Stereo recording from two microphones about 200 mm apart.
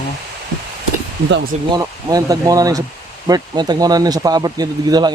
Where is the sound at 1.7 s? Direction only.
20° right (ahead or behind).